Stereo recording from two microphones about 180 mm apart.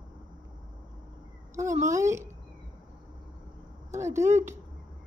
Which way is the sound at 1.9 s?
15° right (ahead or behind).